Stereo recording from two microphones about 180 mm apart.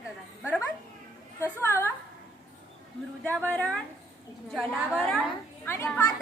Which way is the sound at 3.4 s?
5° left (ahead or behind).